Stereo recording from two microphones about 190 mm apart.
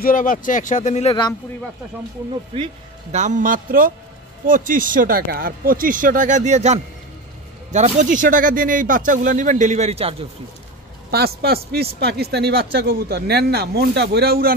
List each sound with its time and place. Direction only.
0.0 s speech: 45° left (ahead or behind)
2.5 s speech: 30° right (ahead or behind)
11.1 s speech: 55° right (ahead or behind)